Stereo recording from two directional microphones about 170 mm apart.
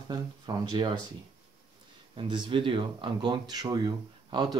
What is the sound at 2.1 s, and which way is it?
Speech, 30° right (ahead or behind).